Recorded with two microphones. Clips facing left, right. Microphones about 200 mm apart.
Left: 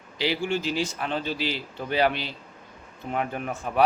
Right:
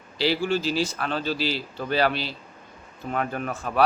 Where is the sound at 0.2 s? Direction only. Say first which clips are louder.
Right 3 dB; 15° left (ahead or behind).